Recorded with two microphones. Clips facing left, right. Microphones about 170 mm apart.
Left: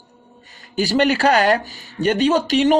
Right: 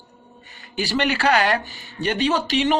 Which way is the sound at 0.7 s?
40° left (ahead or behind).